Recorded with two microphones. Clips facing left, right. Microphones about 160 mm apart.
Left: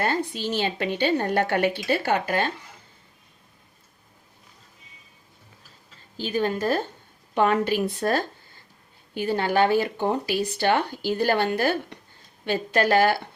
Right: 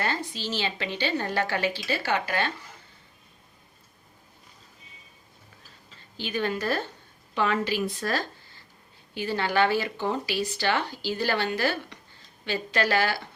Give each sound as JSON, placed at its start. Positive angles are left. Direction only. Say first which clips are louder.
{"t": 0.0, "sound": "speech", "louder": "left 5 dB", "side_deg": 50}
{"t": 6.1, "sound": "speech", "louder": "left 4 dB", "side_deg": 40}